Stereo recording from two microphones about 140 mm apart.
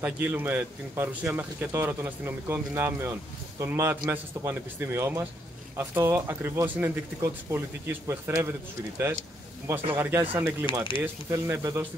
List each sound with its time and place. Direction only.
0.0 s a man's voice: 15° right (ahead or behind)
9.9 s a man's voice: 15° right (ahead or behind)
10.7 s speech: 35° left (ahead or behind)
11.2 s a man's voice: 20° right (ahead or behind)